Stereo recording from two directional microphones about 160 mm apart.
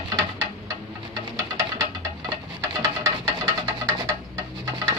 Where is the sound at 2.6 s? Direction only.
20° right (ahead or behind).